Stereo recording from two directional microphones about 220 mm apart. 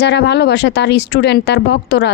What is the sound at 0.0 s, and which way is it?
A woman's voice, 50° left (ahead or behind).